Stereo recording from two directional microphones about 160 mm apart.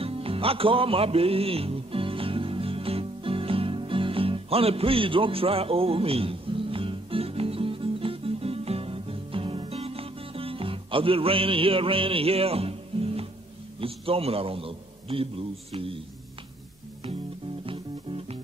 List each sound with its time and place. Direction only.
0.0 s music: 35° right (ahead or behind)
13.7 s a man's voice: 35° right (ahead or behind)
17.6 s music: 35° right (ahead or behind)